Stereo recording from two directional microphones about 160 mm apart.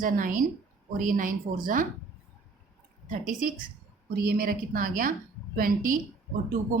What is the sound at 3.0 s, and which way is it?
Speech, 55° right (ahead or behind).